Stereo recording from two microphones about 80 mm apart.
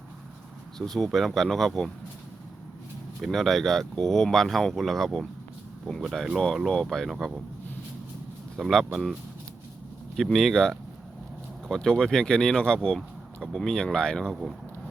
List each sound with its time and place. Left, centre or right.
0.8 s speech: centre
3.2 s speech: centre
8.5 s speech: centre
10.2 s speech: centre